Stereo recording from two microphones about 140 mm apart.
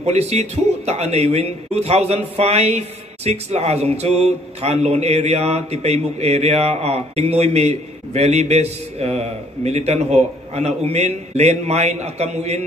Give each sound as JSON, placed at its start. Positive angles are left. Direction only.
{"t": 0.0, "sound": "a man's voice", "side_deg": -50}